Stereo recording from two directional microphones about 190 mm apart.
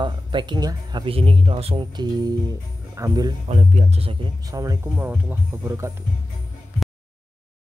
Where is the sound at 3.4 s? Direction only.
35° right (ahead or behind); by 5.9 s 15° right (ahead or behind).